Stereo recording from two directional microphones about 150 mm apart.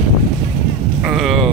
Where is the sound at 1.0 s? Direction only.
Centre (ahead or behind).